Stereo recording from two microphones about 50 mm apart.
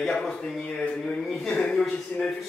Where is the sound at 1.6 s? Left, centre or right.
Centre.